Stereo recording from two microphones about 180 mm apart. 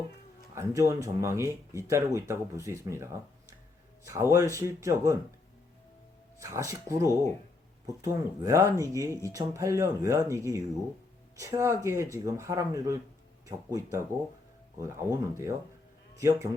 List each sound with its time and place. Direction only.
0.5 s speech: 20° right (ahead or behind)
6.4 s speech: 15° right (ahead or behind)